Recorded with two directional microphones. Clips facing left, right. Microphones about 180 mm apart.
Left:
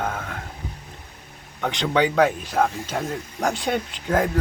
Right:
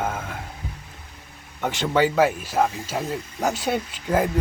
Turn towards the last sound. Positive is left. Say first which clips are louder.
# even
turn(degrees=-5)  # may be behind; listen again after turning